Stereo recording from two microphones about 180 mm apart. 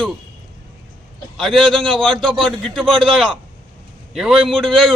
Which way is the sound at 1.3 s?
Centre (ahead or behind).